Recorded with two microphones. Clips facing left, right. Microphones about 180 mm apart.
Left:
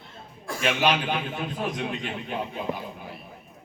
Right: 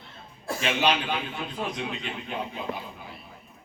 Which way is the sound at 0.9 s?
50° left (ahead or behind).